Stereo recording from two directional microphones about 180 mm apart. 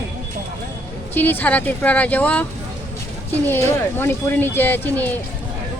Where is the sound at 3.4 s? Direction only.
10° left (ahead or behind).